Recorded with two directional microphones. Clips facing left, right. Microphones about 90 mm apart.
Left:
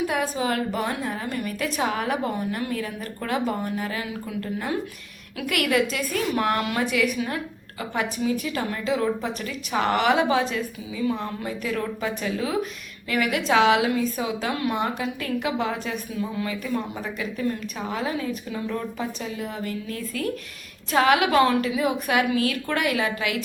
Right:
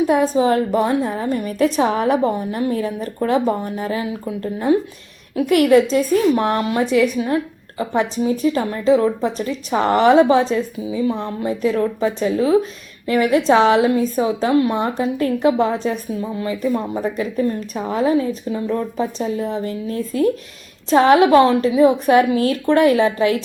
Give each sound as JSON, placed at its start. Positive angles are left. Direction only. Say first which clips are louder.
{"t": 0.0, "sound": "a woman's voice", "louder": "right 9 dB", "side_deg": -30}